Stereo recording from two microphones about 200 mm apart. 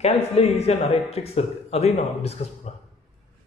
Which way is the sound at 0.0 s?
30° left (ahead or behind).